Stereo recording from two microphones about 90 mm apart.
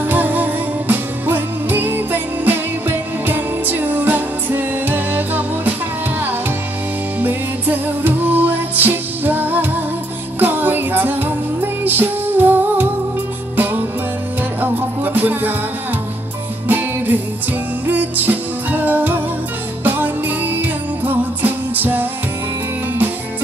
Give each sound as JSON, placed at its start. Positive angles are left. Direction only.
{"t": 0.0, "sound": "music", "side_deg": -20}
{"t": 7.2, "sound": "music", "side_deg": -20}
{"t": 15.1, "sound": "music", "side_deg": -20}
{"t": 16.6, "sound": "music", "side_deg": -20}